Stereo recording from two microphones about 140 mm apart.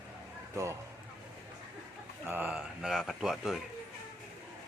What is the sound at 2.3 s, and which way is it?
Speech, 10° right (ahead or behind).